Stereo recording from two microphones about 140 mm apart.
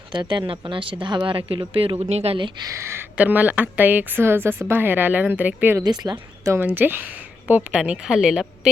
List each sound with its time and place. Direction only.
0.1 s speech: 35° right (ahead or behind)
2.6 s a woman's voice: 20° right (ahead or behind)
5.8 s a woman's voice: 30° right (ahead or behind); by 8.7 s 5° right (ahead or behind)